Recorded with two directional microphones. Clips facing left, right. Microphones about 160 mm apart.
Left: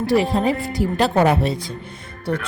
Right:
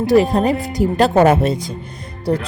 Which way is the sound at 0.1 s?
45° right (ahead or behind).